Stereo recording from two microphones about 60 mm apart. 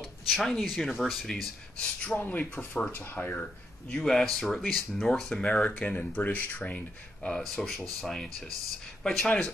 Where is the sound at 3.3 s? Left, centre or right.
Centre.